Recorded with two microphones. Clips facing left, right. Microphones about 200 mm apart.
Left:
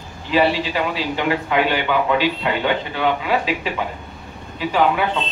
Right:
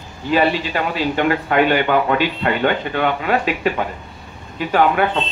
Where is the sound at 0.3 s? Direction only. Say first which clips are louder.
Right 1 dB; 50° right (ahead or behind).